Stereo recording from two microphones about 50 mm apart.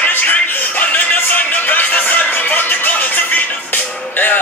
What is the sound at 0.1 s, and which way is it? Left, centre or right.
Music, left.